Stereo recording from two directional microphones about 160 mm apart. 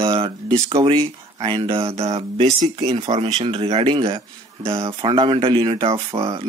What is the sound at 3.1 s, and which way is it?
Speech, 30° right (ahead or behind).